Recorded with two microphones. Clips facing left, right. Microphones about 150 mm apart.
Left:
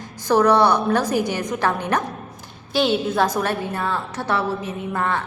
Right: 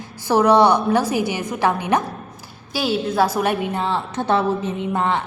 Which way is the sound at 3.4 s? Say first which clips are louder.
Right 3 dB; 15° right (ahead or behind).